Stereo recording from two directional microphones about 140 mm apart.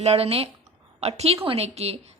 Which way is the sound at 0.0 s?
50° right (ahead or behind).